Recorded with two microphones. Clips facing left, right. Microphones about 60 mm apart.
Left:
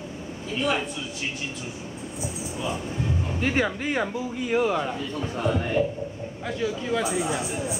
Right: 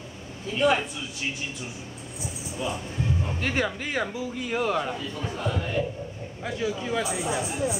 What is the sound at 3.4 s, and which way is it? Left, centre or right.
Speech, centre.